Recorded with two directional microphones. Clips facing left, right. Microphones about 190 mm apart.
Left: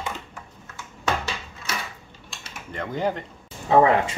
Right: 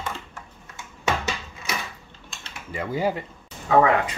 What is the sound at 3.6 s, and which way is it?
Speech, 25° left (ahead or behind).